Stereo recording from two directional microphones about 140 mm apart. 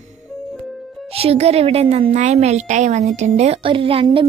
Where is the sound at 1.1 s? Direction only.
45° right (ahead or behind).